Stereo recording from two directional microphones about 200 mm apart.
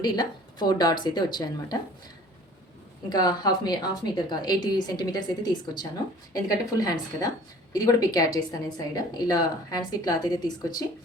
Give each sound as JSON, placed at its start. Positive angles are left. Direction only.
{"t": 0.0, "sound": "a woman's voice", "side_deg": 20}
{"t": 3.1, "sound": "a woman's voice", "side_deg": 20}